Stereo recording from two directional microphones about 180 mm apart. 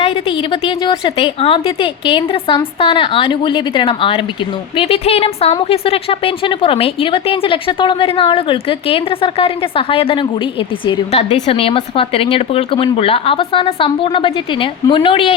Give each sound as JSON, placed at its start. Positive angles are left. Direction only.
{"t": 0.0, "sound": "a woman's voice", "side_deg": 30}